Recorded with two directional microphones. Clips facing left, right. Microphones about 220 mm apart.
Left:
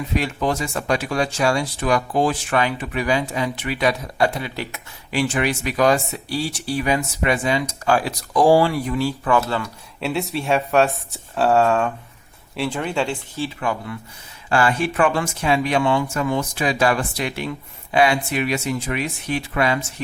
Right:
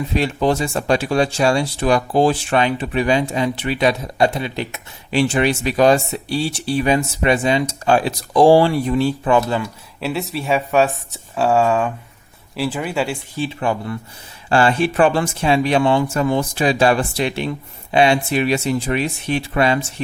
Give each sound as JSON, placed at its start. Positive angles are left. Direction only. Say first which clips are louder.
{"t": 0.1, "sound": "speech", "louder": "right 4 dB", "side_deg": -30}
{"t": 10.0, "sound": "speech", "louder": "even", "side_deg": 0}
{"t": 13.6, "sound": "speech", "louder": "right 4 dB", "side_deg": -35}